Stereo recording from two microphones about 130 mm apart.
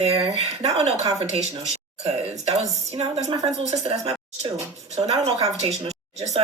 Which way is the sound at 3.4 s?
60° right (ahead or behind).